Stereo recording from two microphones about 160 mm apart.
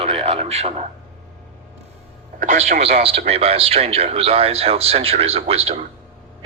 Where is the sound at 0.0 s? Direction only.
40° right (ahead or behind).